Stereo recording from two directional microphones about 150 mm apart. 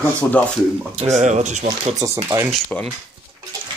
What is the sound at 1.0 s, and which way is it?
Speech, 50° right (ahead or behind).